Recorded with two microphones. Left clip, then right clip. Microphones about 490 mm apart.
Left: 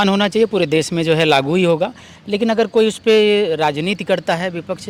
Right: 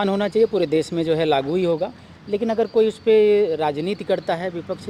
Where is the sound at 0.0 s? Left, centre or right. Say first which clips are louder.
Left 4 dB; left.